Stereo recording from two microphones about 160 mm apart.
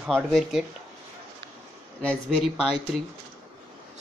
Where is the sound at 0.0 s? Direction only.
Centre (ahead or behind).